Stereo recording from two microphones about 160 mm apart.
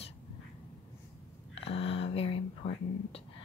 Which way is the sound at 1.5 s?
35° left (ahead or behind).